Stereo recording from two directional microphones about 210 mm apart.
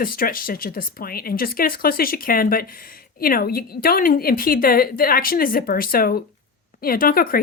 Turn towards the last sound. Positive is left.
turn(degrees=45)  # may be behind; listen again after turning